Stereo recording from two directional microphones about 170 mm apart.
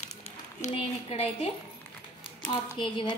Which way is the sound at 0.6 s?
35° left (ahead or behind).